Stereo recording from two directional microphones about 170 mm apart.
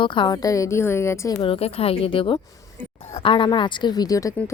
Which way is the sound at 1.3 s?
35° left (ahead or behind).